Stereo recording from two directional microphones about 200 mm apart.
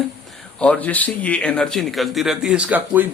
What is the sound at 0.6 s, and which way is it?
A man's voice, 5° left (ahead or behind).